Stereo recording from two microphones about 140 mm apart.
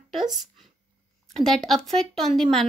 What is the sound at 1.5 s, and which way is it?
Speech, centre (ahead or behind).